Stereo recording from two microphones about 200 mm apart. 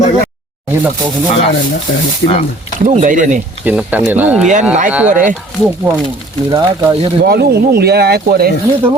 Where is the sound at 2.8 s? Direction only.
40° right (ahead or behind).